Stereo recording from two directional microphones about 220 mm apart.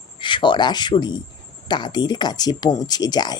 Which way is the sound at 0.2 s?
20° left (ahead or behind).